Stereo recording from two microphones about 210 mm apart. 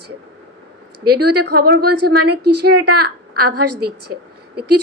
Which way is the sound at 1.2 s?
50° right (ahead or behind).